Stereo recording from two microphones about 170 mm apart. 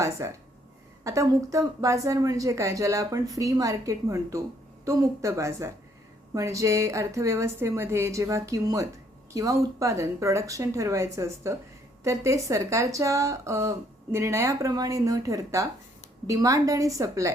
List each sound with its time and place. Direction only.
0.0 s a woman's voice: 15° right (ahead or behind)